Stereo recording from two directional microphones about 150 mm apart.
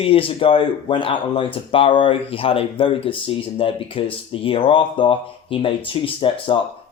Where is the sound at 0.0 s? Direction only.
40° left (ahead or behind).